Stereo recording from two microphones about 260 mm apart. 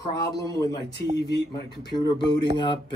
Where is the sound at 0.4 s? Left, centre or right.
Centre.